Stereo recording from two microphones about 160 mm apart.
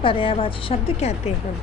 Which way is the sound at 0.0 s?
35° left (ahead or behind).